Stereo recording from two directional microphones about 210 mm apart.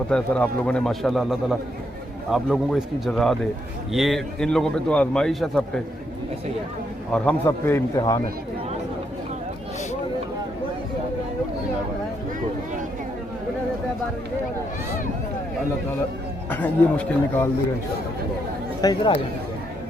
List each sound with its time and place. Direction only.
0.1 s a man's voice: 5° left (ahead or behind)
7.1 s a man's voice: 10° left (ahead or behind)
16.5 s a man's voice: 10° left (ahead or behind)
18.8 s speech: 20° left (ahead or behind)